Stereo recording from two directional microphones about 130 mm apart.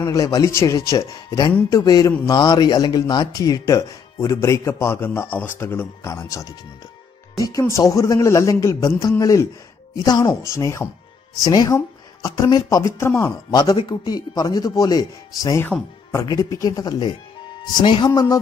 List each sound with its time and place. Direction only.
0.0 s a man's voice: 25° left (ahead or behind)